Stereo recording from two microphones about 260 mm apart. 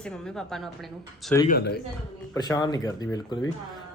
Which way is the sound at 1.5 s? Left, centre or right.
Left.